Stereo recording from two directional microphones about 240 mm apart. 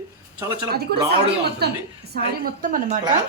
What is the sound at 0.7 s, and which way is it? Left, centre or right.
A woman's voice, right.